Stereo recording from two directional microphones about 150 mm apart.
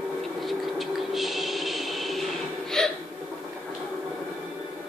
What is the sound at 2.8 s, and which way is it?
Hiccup, 5° left (ahead or behind).